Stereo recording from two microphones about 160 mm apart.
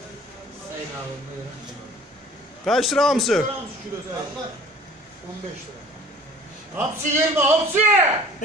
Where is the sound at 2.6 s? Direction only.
Centre (ahead or behind).